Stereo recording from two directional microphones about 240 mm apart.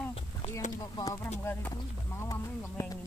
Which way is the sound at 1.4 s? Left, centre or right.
Centre.